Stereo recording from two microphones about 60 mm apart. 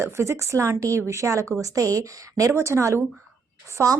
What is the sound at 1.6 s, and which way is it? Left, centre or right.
Speech, right.